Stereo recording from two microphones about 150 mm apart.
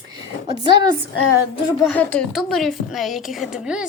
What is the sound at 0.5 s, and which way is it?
Speech, 30° right (ahead or behind).